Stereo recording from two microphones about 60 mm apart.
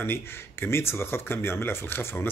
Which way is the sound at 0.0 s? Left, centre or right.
Left.